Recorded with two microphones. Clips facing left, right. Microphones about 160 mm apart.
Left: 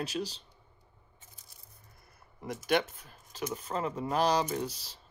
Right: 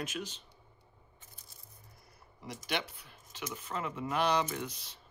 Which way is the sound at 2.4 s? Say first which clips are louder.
Left 8 dB; 45° left (ahead or behind).